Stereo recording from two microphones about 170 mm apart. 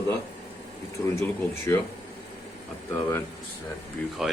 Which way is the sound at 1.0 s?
20° left (ahead or behind).